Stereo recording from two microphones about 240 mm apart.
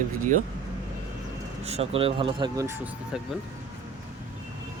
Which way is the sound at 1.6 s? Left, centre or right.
Right.